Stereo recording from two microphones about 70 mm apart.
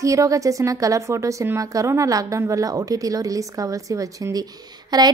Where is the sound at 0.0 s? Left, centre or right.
Right.